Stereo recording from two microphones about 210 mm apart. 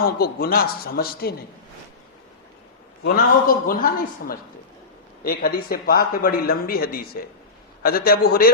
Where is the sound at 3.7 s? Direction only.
45° left (ahead or behind).